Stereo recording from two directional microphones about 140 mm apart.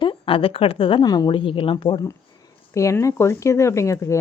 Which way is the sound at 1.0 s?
25° left (ahead or behind).